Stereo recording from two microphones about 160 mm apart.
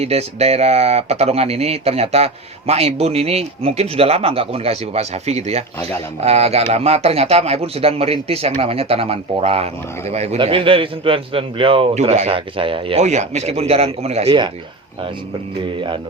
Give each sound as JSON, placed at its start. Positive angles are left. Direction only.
{"t": 0.0, "sound": "speech", "side_deg": -40}